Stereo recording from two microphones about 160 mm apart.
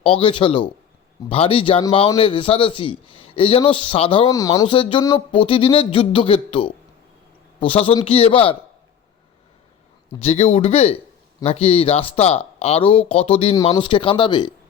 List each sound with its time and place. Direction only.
0.0 s speech: 35° left (ahead or behind)
4.3 s speech: 20° left (ahead or behind)
4.7 s speech: 30° left (ahead or behind)
10.2 s speech: 40° left (ahead or behind)